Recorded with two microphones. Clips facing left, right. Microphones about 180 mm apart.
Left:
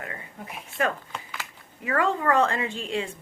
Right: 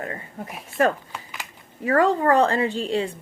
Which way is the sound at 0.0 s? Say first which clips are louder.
Right 6 dB; 40° right (ahead or behind).